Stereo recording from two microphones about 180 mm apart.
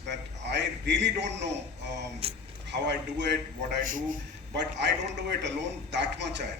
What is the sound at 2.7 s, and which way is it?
Speech, 70° right (ahead or behind).